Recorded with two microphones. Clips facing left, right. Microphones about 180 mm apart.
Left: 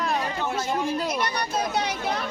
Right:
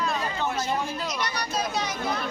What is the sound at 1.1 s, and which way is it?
Speech, 55° left (ahead or behind).